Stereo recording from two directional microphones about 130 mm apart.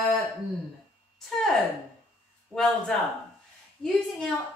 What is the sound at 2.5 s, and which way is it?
A woman's voice, 5° left (ahead or behind).